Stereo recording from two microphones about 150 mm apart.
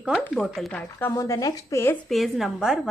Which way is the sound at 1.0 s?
20° left (ahead or behind).